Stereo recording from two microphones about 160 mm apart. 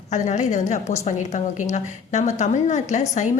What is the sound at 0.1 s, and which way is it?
A woman's voice, 50° left (ahead or behind).